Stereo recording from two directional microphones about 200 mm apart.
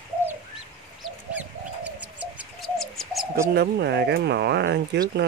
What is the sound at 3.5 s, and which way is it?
Speech, 55° right (ahead or behind).